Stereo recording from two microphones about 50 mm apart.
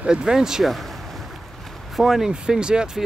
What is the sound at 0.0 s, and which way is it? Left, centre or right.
Speech, centre.